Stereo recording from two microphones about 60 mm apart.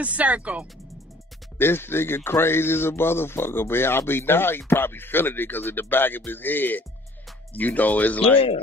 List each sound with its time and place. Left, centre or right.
0.0 s speech: right
1.6 s speech: left